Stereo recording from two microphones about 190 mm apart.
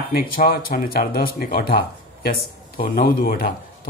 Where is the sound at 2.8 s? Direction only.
50° left (ahead or behind).